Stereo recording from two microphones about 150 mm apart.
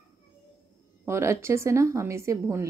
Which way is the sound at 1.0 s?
20° right (ahead or behind).